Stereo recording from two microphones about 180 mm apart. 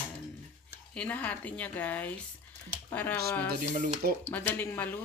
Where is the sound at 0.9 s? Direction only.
10° left (ahead or behind).